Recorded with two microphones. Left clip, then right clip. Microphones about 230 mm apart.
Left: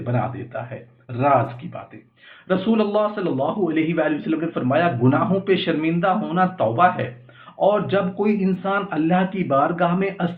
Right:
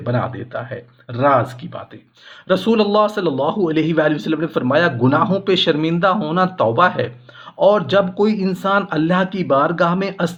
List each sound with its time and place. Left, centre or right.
0.0 s a man's voice: right
2.5 s a man's voice: right